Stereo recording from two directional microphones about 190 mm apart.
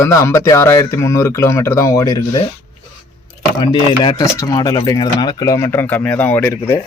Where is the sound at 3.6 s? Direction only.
20° left (ahead or behind).